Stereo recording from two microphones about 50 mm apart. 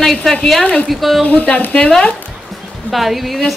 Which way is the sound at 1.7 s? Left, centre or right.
Centre.